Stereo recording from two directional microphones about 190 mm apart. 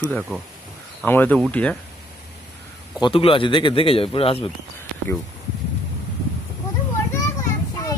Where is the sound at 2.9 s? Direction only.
25° left (ahead or behind).